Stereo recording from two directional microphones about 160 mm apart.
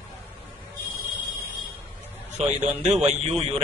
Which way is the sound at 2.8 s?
45° right (ahead or behind).